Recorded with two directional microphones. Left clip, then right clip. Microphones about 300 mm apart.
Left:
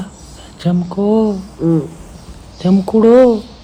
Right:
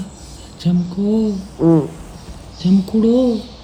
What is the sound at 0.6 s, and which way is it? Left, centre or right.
Speech, left.